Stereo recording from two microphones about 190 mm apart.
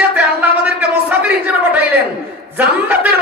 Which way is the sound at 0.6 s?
5° right (ahead or behind).